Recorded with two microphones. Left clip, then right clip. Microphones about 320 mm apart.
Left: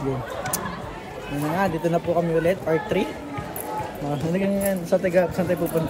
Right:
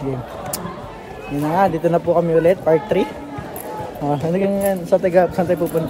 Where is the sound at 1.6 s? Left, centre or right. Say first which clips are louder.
Right 7 dB; centre.